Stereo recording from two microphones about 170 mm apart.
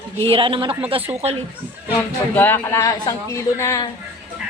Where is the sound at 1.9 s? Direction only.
10° left (ahead or behind).